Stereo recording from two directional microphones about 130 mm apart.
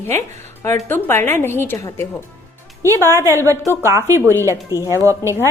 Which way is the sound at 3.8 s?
25° right (ahead or behind).